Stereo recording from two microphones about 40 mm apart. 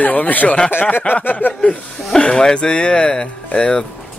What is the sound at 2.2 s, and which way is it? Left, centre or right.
Speech, left.